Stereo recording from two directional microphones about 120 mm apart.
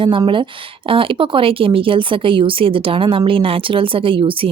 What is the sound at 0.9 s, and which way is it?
Speech, 45° right (ahead or behind).